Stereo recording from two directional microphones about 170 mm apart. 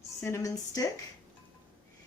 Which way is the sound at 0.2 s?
15° left (ahead or behind).